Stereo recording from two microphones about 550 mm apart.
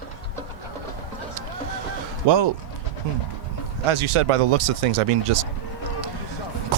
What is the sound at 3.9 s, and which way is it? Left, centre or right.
Speech, right.